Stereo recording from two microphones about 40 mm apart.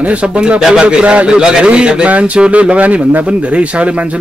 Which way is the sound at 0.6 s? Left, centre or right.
Centre.